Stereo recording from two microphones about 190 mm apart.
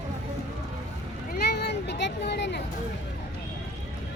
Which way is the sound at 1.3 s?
60° left (ahead or behind).